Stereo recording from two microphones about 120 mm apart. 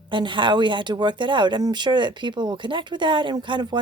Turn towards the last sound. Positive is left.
turn(degrees=-40)  # may be behind; listen again after turning